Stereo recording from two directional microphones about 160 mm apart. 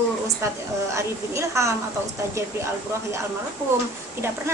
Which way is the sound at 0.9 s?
20° right (ahead or behind).